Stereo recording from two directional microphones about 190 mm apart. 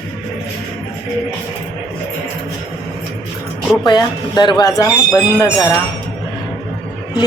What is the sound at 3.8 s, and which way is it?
Speech, 20° left (ahead or behind).